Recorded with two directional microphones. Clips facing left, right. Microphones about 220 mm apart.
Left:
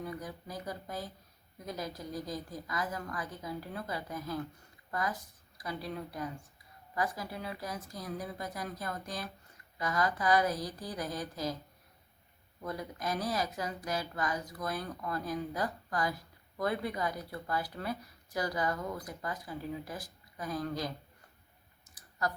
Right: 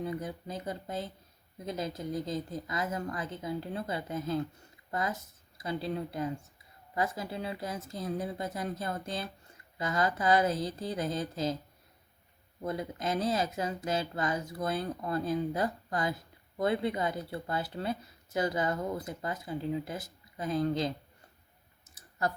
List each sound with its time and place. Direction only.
0.0 s speech: 25° right (ahead or behind)
12.6 s speech: 25° right (ahead or behind)